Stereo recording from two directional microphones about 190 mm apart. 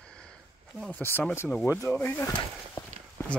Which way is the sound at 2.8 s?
20° left (ahead or behind).